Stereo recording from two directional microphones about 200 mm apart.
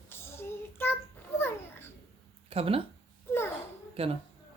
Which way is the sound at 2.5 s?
30° right (ahead or behind).